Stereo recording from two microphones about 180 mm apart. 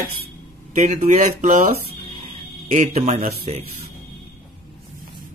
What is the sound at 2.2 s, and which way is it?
Speech, 40° right (ahead or behind).